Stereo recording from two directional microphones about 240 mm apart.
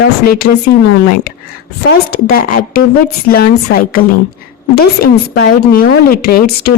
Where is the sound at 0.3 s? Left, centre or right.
Left.